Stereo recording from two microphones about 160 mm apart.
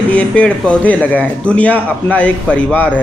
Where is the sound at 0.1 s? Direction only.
10° left (ahead or behind).